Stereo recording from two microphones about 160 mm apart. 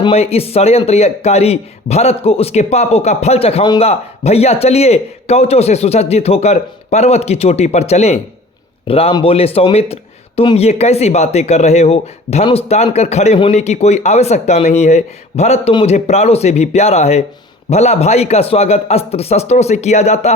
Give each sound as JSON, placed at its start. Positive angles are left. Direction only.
{"t": 0.0, "sound": "a man's voice", "side_deg": 40}